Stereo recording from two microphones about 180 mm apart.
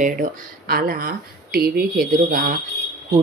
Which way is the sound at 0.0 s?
50° right (ahead or behind).